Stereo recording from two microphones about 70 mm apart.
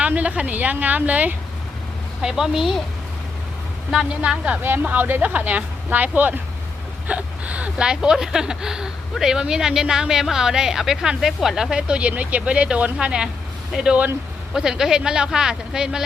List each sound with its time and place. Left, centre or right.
0.0 s speech: centre
2.2 s a woman's voice: centre
3.9 s a woman's voice: centre